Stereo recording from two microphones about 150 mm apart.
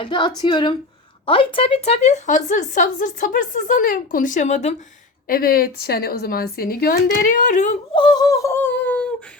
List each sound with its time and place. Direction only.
0.0 s a woman's voice: 30° left (ahead or behind); by 4.7 s 50° left (ahead or behind)
5.3 s speech: 80° left; by 7.8 s 55° left (ahead or behind)
7.9 s a sound: 30° left (ahead or behind); by 9.0 s 10° left (ahead or behind)